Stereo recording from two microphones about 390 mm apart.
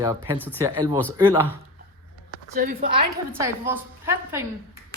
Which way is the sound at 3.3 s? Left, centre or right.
Centre.